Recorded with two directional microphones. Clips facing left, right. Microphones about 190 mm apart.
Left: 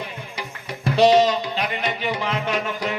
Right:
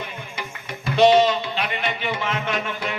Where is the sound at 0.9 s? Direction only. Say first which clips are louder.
Even; 40° left (ahead or behind).